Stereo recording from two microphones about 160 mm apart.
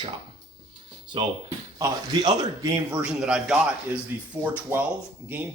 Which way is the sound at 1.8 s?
20° right (ahead or behind).